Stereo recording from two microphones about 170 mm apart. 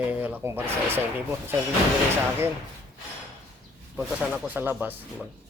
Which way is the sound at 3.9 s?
10° right (ahead or behind).